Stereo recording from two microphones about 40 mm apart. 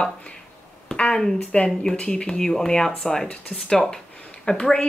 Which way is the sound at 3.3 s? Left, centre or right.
Left.